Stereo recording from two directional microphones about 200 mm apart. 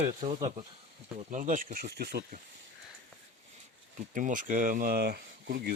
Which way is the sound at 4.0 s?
40° right (ahead or behind).